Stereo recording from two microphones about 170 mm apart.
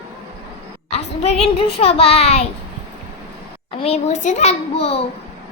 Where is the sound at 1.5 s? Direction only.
35° left (ahead or behind).